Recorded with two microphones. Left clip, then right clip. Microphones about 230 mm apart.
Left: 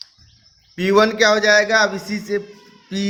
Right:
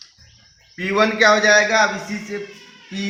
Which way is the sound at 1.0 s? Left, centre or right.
Left.